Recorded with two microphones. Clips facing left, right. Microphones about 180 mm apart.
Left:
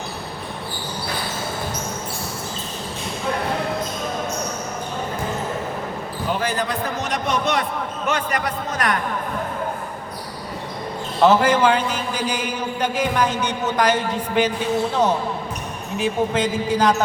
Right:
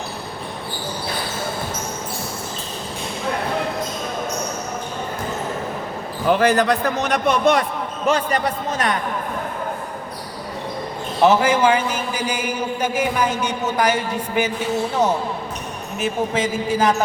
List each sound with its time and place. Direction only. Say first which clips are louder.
6.4 s a man's voice: right 7 dB; 75° right (ahead or behind); by 7.6 s 50° right (ahead or behind)
8.0 s a man's voice: right 5 dB; 30° right (ahead or behind)
11.2 s speech: even; 10° right (ahead or behind)